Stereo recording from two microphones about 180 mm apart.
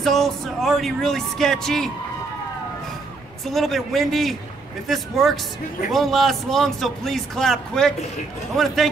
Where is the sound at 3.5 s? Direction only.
Centre (ahead or behind).